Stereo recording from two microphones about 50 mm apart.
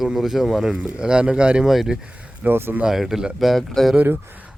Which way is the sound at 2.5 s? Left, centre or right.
Right.